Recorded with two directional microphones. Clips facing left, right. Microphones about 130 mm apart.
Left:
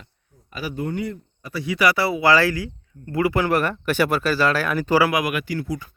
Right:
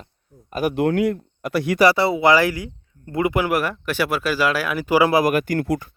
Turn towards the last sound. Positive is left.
turn(degrees=-55)  # may be behind; listen again after turning